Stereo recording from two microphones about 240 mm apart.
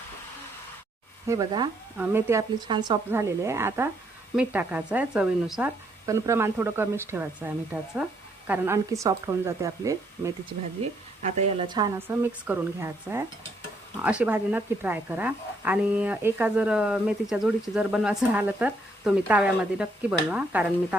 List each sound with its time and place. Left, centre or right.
1.3 s speech: centre
11.2 s a woman's voice: right; by 20.7 s centre